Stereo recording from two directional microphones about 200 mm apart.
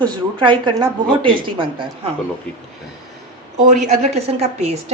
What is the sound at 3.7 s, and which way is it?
Speech, 35° right (ahead or behind).